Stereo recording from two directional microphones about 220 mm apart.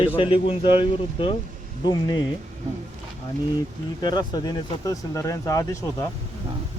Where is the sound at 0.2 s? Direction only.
25° left (ahead or behind).